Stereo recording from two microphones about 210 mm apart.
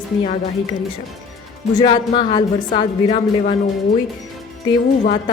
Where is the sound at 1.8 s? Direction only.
25° left (ahead or behind).